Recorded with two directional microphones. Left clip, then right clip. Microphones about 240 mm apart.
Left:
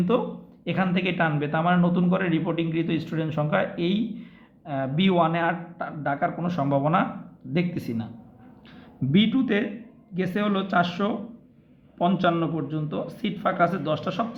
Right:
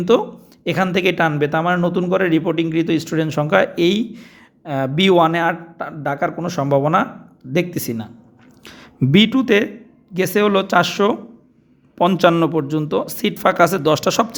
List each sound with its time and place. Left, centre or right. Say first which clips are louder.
0.1 s speech: right 11 dB; right